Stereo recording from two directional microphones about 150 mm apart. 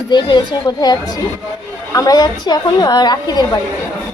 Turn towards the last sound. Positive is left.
turn(degrees=25)  # may be behind; listen again after turning